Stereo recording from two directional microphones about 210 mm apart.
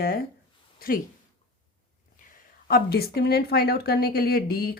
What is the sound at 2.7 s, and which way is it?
A woman's voice, 45° left (ahead or behind).